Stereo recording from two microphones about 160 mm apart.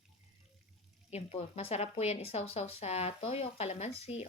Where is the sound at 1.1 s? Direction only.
45° left (ahead or behind).